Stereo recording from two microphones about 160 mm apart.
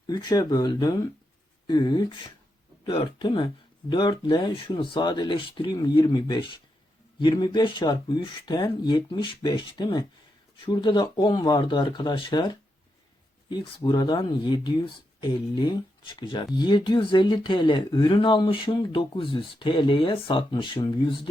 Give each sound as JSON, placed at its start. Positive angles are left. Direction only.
{"t": 0.1, "sound": "speech", "side_deg": 25}